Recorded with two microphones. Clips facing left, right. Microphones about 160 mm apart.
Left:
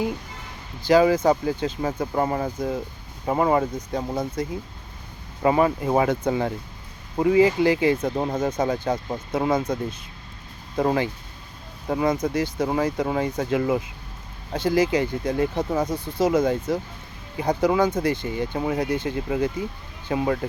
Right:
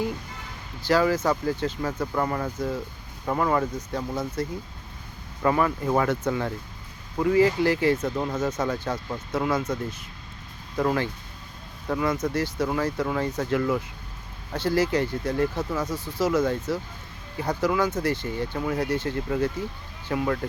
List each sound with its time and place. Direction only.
0.9 s speech: 15° left (ahead or behind)
5.4 s speech: 20° left (ahead or behind)
8.0 s speech: 30° left (ahead or behind)
10.8 s speech: 25° left (ahead or behind)
15.5 s speech: 30° left (ahead or behind)
18.0 s speech: 15° left (ahead or behind)